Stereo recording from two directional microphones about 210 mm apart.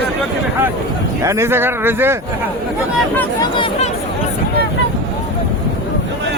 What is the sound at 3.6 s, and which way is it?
Speech, 30° left (ahead or behind).